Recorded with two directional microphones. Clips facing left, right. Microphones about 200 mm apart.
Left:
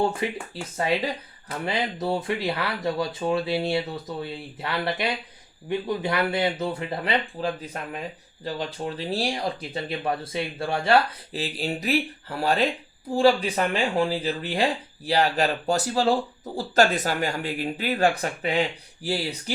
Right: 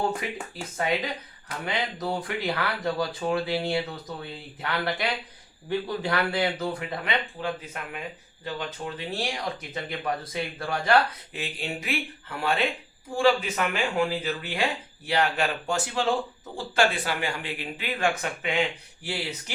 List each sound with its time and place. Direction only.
0.2 s speech: 30° left (ahead or behind)